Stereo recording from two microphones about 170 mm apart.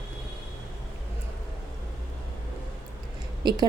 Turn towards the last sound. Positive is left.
turn(degrees=-25)  # may be behind; listen again after turning